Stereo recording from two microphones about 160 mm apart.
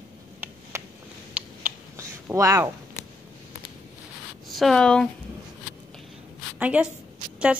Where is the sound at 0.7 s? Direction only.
15° right (ahead or behind).